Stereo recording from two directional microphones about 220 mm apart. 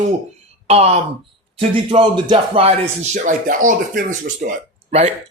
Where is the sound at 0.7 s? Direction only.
25° right (ahead or behind).